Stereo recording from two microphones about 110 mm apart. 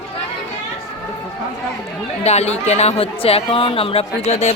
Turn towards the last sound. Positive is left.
turn(degrees=90)